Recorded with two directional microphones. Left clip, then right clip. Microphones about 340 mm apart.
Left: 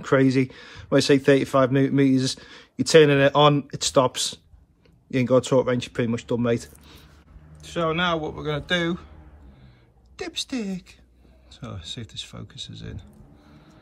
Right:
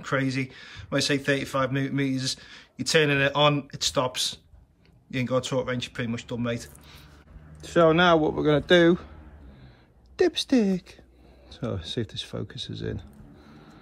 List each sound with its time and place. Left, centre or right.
0.0 s a man's voice: centre
7.6 s speech: centre
10.2 s speech: centre
13.5 s a sound: centre